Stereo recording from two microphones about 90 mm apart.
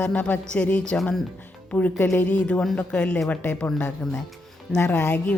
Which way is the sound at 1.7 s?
15° left (ahead or behind).